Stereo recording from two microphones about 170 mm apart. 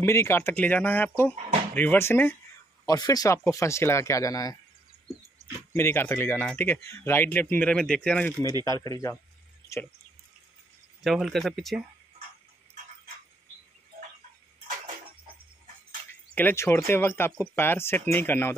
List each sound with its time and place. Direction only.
0.0 s speech: 15° left (ahead or behind)
5.7 s speech: 15° left (ahead or behind)
8.6 s speech: 20° left (ahead or behind)
11.1 s speech: centre (ahead or behind)
16.3 s speech: 15° left (ahead or behind)